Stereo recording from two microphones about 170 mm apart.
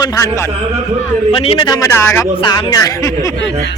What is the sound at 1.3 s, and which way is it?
A man's voice, 30° left (ahead or behind).